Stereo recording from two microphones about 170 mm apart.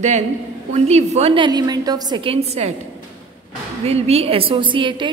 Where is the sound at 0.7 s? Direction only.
40° right (ahead or behind).